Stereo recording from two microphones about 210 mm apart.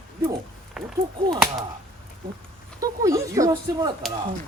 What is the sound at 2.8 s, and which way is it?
Speech, 15° right (ahead or behind).